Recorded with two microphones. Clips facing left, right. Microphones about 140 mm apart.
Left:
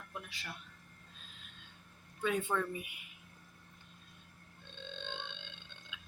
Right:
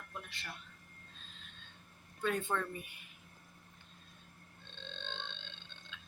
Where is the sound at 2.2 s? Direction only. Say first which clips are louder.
Left 1 dB; 5° left (ahead or behind).